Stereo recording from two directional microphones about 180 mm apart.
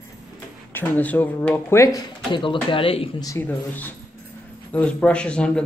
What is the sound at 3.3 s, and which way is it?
Speech, 10° left (ahead or behind).